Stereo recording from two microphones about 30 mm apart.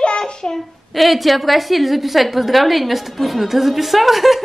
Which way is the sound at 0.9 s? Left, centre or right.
Centre.